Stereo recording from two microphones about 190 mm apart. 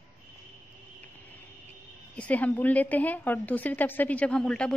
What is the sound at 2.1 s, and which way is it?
A woman's voice, 5° left (ahead or behind).